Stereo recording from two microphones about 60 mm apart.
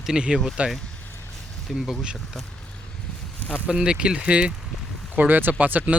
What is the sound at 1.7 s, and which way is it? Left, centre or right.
Speech, centre.